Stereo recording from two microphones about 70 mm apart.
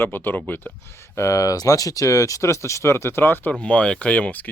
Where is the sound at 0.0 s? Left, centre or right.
Left.